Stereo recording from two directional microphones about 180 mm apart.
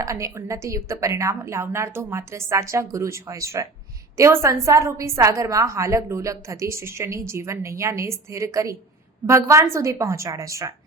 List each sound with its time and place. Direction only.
0.0 s a woman's voice: 15° right (ahead or behind)